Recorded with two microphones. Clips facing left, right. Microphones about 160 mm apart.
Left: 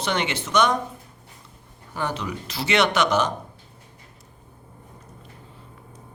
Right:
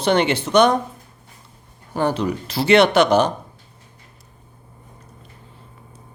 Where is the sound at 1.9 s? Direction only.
35° right (ahead or behind).